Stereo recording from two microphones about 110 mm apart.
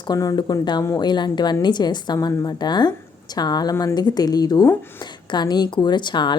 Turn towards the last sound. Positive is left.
turn(degrees=45)  # may be behind; listen again after turning